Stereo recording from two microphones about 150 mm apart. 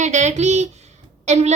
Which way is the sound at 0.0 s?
50° right (ahead or behind).